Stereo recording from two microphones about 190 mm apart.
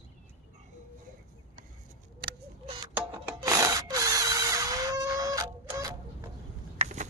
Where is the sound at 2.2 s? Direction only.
55° right (ahead or behind).